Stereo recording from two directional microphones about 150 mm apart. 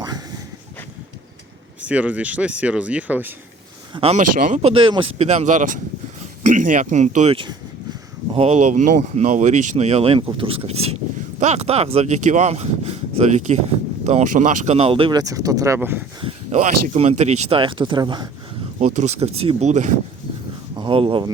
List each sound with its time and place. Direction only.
1.8 s speech: 10° right (ahead or behind)
3.9 s speech: 45° right (ahead or behind)
4.2 s speech: 60° right (ahead or behind)
4.6 s speech: 35° right (ahead or behind)
8.4 s speech: 50° right (ahead or behind)
15.2 s speech: 25° right (ahead or behind)
16.5 s speech: 50° right (ahead or behind)
17.6 s speech: 35° right (ahead or behind)
18.8 s speech: 50° right (ahead or behind)
20.7 s speech: 35° right (ahead or behind)